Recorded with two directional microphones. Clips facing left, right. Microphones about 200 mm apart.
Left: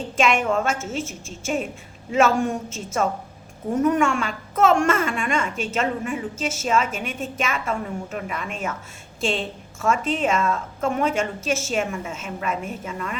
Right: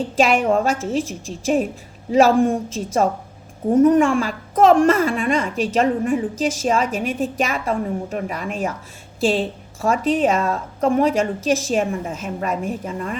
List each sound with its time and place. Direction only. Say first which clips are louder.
0.2 s a woman's voice: right 4 dB; 35° right (ahead or behind)
2.1 s a woman's voice: right 5 dB; 30° right (ahead or behind)